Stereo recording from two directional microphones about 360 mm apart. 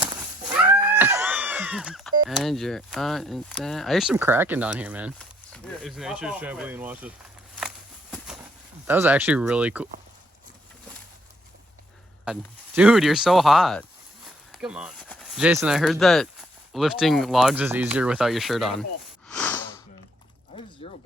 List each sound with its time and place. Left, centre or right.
0.0 s speech: centre
8.9 s speech: centre
12.2 s speech: centre
19.3 s wheeze: centre
20.5 s a sound: centre